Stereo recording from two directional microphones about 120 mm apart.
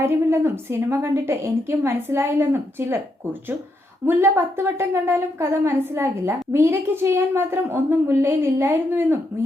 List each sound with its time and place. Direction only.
0.0 s a woman's voice: 20° right (ahead or behind)
4.0 s a woman's voice: 20° right (ahead or behind)